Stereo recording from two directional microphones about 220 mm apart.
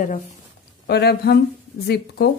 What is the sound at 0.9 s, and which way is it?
Speech, 50° left (ahead or behind).